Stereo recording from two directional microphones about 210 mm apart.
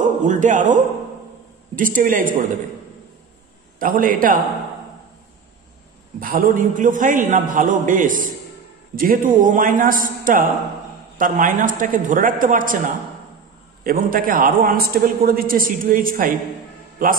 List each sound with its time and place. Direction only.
0.0 s a man's voice: 35° right (ahead or behind)
1.8 s a man's voice: 40° right (ahead or behind)
3.8 s a man's voice: 40° right (ahead or behind)
6.1 s a man's voice: 40° right (ahead or behind)